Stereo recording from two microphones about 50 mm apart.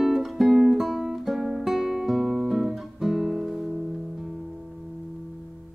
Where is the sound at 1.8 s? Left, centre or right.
Centre.